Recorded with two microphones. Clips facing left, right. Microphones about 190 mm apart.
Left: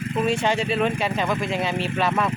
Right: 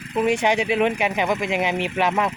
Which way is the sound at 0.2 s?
15° right (ahead or behind).